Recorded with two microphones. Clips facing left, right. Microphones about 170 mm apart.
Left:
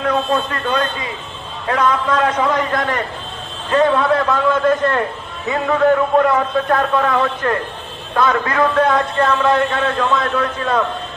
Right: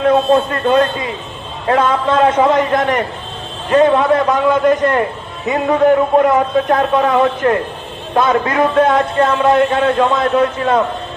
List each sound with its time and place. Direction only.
0.0 s a man's voice: 30° right (ahead or behind)